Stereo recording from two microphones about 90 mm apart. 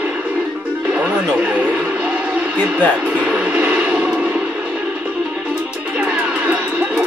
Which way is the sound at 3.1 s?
15° right (ahead or behind).